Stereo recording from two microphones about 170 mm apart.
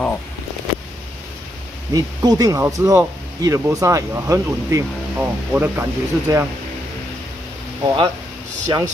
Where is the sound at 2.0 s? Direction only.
20° right (ahead or behind).